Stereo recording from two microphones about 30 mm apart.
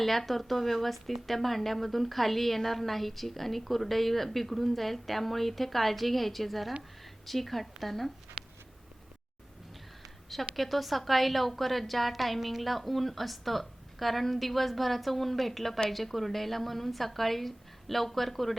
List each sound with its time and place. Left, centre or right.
0.0 s speech: centre
10.5 s speech: centre